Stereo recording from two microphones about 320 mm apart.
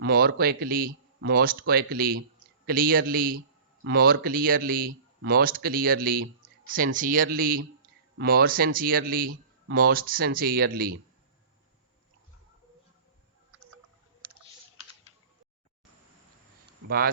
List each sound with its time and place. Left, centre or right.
0.0 s speech: right